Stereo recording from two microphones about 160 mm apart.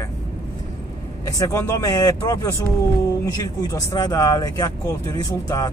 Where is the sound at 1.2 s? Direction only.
20° left (ahead or behind).